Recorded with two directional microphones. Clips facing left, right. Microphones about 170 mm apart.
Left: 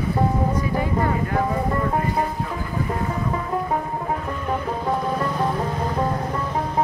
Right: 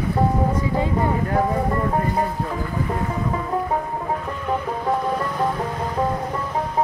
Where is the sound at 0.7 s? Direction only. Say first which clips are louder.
Right 1 dB; 20° right (ahead or behind).